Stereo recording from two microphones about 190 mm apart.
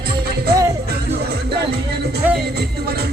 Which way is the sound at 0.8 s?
60° right (ahead or behind).